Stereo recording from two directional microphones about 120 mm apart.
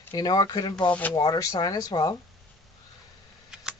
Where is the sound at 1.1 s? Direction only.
35° left (ahead or behind).